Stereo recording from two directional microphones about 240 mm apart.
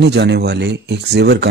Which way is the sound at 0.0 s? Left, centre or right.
Right.